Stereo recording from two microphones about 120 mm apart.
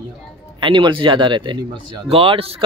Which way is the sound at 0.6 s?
45° right (ahead or behind).